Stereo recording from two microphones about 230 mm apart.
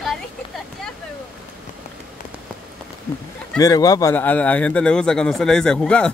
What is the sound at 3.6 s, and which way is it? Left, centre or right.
A man's voice, centre.